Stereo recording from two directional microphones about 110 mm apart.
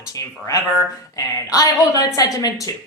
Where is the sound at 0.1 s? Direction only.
30° left (ahead or behind).